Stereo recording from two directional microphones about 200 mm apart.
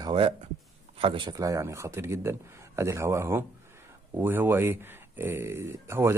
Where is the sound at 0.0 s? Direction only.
25° right (ahead or behind).